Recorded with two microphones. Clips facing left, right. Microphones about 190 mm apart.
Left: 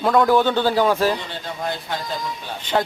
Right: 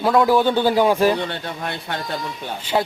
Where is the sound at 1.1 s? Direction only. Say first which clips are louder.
Right 4 dB; 65° right (ahead or behind).